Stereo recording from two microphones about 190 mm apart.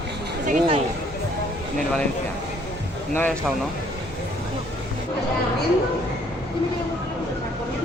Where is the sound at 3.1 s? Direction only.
10° left (ahead or behind).